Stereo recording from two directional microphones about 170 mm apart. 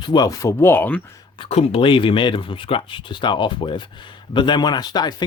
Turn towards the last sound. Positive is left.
turn(degrees=25)  # may be behind; listen again after turning